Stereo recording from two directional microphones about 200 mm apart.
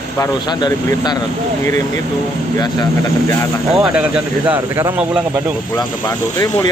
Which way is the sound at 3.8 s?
5° right (ahead or behind).